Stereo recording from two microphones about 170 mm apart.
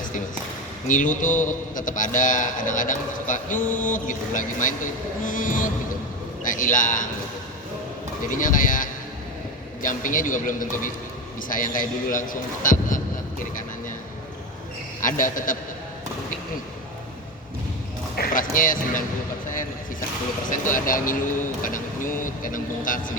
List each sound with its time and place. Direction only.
0.9 s a man's voice: 50° left (ahead or behind)
8.3 s a man's voice: 50° left (ahead or behind)
15.0 s a man's voice: 50° left (ahead or behind)
18.2 s a man's voice: 50° left (ahead or behind)
20.5 s a man's voice: 50° left (ahead or behind)